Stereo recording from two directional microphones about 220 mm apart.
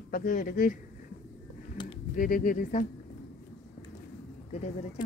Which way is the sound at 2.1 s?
40° left (ahead or behind).